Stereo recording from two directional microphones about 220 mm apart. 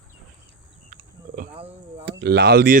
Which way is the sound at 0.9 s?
40° right (ahead or behind).